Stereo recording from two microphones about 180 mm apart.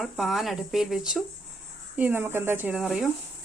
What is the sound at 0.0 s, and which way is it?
Speech, centre (ahead or behind).